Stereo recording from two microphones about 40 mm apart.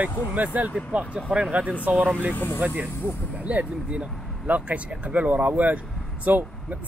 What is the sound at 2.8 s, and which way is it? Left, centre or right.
Speech, left.